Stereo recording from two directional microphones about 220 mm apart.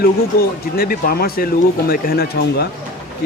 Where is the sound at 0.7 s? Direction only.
45° left (ahead or behind).